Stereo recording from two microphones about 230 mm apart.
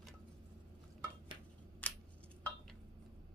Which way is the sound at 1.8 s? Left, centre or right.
Centre.